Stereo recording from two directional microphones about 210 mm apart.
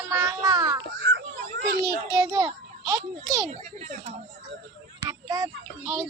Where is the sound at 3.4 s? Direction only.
35° right (ahead or behind).